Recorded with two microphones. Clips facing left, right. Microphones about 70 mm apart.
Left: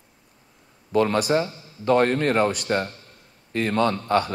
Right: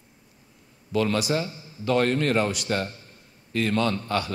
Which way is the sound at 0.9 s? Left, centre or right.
Left.